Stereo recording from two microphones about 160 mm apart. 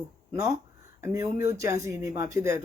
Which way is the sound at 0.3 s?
15° right (ahead or behind).